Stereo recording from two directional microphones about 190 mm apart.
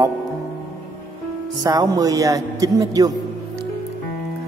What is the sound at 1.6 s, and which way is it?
Speech, 20° right (ahead or behind).